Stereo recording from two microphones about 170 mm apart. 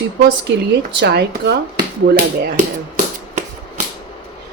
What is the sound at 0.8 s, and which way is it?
Speech, 75° right (ahead or behind).